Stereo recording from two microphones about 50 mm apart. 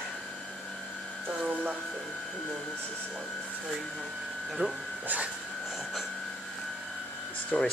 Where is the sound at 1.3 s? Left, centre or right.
Centre.